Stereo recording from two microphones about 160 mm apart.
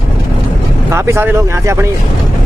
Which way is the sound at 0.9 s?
15° right (ahead or behind).